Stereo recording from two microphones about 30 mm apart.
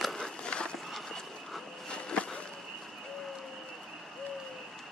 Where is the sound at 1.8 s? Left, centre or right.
Left.